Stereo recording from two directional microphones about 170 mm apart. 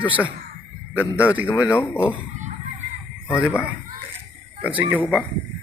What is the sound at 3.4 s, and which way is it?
Speech, 5° right (ahead or behind).